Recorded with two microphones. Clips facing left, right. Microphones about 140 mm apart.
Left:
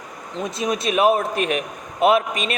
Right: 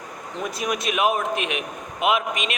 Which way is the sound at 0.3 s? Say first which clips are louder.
Left 3 dB; 25° left (ahead or behind).